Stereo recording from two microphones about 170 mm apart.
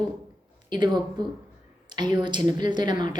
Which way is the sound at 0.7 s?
25° right (ahead or behind).